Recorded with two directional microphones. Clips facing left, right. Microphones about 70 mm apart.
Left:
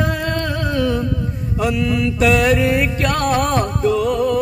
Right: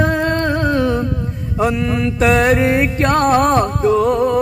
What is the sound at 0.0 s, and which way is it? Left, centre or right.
Music, right.